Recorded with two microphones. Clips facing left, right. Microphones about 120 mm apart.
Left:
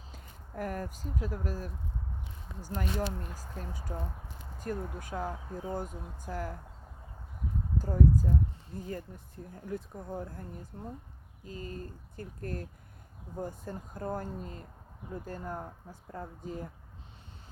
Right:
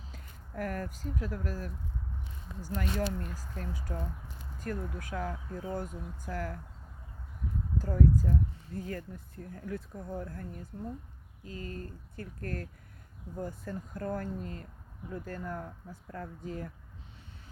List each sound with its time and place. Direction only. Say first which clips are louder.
0.1 s speech: left 1 dB; 25° left (ahead or behind)
2.7 s speech: right 1 dB; 25° left (ahead or behind)
7.8 s speech: even; 15° left (ahead or behind)
10.7 s speech: right 4 dB; 35° left (ahead or behind)
11.4 s speech: even; 20° left (ahead or behind)